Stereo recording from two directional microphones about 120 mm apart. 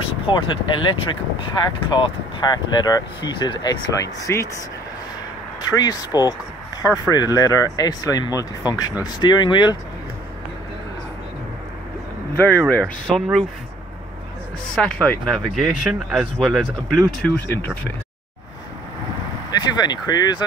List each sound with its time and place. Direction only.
0.3 s speech: 40° left (ahead or behind)
3.9 s speech: 25° left (ahead or behind)
5.6 s speech: 35° left (ahead or behind)
12.4 s speech: 15° left (ahead or behind)
14.8 s speech: 10° left (ahead or behind)
17.5 s speech: 15° left (ahead or behind)
19.5 s speech: 35° left (ahead or behind)